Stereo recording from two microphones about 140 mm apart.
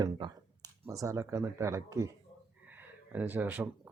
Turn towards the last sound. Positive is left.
turn(degrees=-15)  # may be behind; listen again after turning